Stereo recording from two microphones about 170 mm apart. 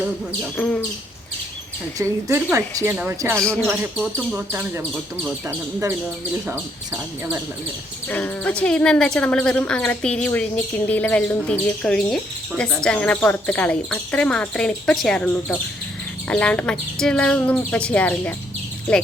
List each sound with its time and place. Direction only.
0.5 s speech: 10° left (ahead or behind)
2.0 s speech: 15° right (ahead or behind)
3.4 s speech: 5° left (ahead or behind)
3.7 s speech: 10° right (ahead or behind)
8.0 s speech: 10° left (ahead or behind)